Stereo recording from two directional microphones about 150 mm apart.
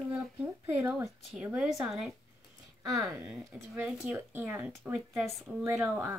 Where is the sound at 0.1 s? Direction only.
10° right (ahead or behind).